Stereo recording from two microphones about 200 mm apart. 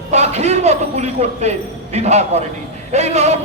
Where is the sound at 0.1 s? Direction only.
35° right (ahead or behind).